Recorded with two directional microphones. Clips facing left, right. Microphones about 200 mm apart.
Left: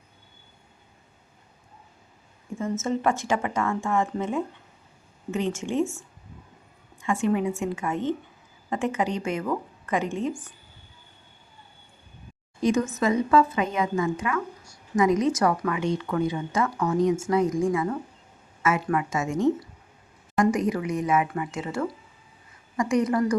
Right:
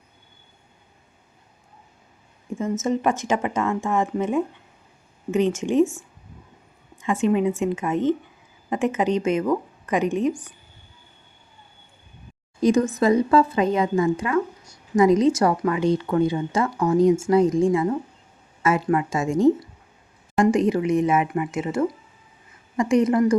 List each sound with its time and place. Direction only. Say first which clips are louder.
2.6 s a woman's voice: right 3 dB; 20° right (ahead or behind)
12.6 s speech: right 5 dB; 35° right (ahead or behind)